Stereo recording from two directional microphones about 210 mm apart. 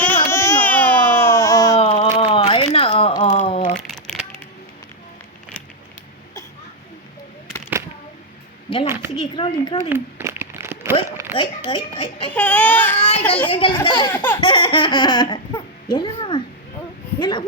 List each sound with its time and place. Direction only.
0.3 s baby cry: 10° left (ahead or behind)
1.8 s a sound: 35° left (ahead or behind)
3.8 s crumpling: 5° left (ahead or behind)
9.1 s a child's voice: 25° left (ahead or behind)
9.9 s a sound: 10° right (ahead or behind)
11.3 s a child's voice: 20° left (ahead or behind)
12.3 s speech: 5° left (ahead or behind)
13.5 s a child's voice: 25° left (ahead or behind)
14.1 s speech: 10° left (ahead or behind)
14.4 s baby laughter: 25° left (ahead or behind)
17.2 s a sound: 20° left (ahead or behind)